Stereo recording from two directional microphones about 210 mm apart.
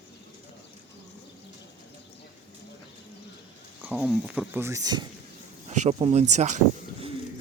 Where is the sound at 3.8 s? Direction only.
5° right (ahead or behind).